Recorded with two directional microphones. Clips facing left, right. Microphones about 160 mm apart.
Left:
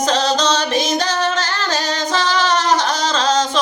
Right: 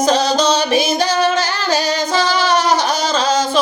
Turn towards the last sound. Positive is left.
turn(degrees=-10)  # may be behind; listen again after turning